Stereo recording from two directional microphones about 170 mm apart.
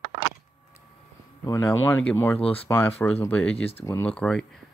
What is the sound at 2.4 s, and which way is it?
Speech, 35° left (ahead or behind).